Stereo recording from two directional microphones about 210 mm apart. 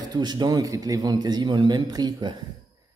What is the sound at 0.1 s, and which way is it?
A man's voice, 20° right (ahead or behind).